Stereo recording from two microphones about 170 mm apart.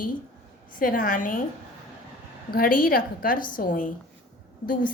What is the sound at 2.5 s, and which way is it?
A woman's voice, 55° left (ahead or behind).